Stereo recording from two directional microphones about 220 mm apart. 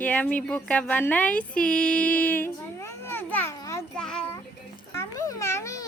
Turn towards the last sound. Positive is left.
turn(degrees=15)  # may be behind; listen again after turning